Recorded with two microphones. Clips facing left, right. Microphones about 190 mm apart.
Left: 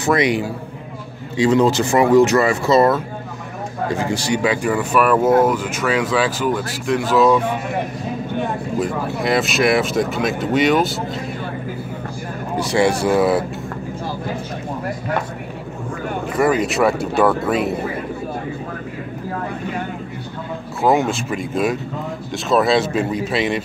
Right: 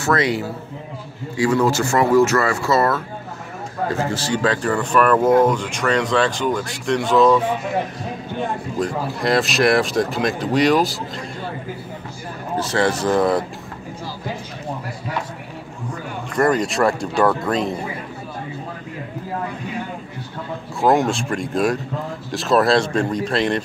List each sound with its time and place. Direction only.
0.0 s speech: 15° left (ahead or behind)
8.7 s speech: 5° left (ahead or behind)
12.5 s speech: 10° left (ahead or behind)
16.3 s speech: 5° left (ahead or behind)
20.8 s speech: centre (ahead or behind)